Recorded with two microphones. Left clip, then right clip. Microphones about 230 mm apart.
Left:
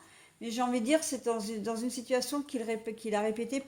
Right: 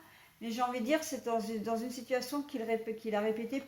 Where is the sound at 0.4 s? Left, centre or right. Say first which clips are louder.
Left 2 dB; left.